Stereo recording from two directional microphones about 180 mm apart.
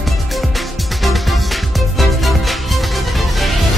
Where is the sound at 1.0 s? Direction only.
Centre (ahead or behind).